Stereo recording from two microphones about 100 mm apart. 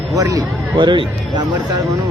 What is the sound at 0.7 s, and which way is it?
Speech, 50° right (ahead or behind).